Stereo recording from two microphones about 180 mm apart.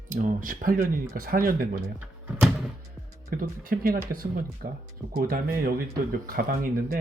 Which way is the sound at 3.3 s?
55° right (ahead or behind).